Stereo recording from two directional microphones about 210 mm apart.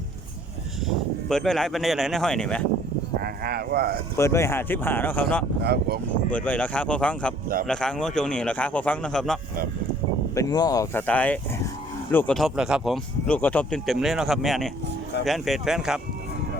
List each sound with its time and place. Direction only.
1.3 s speech: centre (ahead or behind)
3.2 s speech: 45° right (ahead or behind)
4.2 s speech: 15° left (ahead or behind)
5.6 s speech: 50° right (ahead or behind)
6.3 s speech: 5° left (ahead or behind)
10.3 s speech: 15° left (ahead or behind); by 16.0 s centre (ahead or behind)